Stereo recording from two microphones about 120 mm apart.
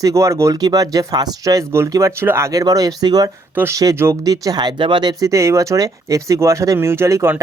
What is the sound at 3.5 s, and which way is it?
Speech, 20° right (ahead or behind).